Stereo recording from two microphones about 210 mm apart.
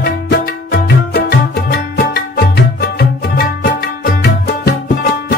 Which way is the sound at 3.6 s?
45° left (ahead or behind).